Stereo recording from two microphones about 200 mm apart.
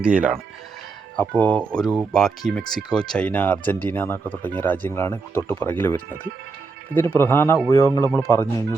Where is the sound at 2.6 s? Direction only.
20° left (ahead or behind).